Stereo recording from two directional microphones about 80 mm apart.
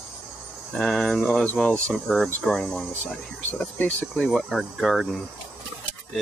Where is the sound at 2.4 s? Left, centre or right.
Centre.